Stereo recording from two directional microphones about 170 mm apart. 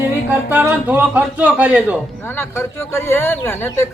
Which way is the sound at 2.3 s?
15° left (ahead or behind).